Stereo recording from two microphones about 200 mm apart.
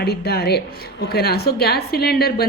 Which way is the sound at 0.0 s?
50° left (ahead or behind).